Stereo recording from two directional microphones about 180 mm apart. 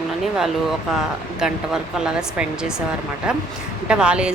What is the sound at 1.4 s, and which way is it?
Speech, 5° right (ahead or behind).